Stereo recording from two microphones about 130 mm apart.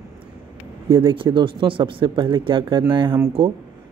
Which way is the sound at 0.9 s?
40° right (ahead or behind).